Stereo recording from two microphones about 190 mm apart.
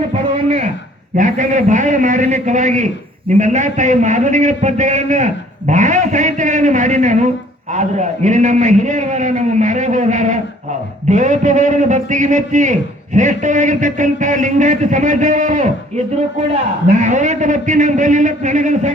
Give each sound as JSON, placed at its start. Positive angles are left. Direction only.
{"t": 0.4, "sound": "a sound", "side_deg": -35}
{"t": 1.1, "sound": "a man's voice", "side_deg": -40}
{"t": 17.0, "sound": "a man's voice", "side_deg": -40}